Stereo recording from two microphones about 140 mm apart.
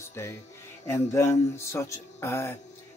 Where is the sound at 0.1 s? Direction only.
20° left (ahead or behind).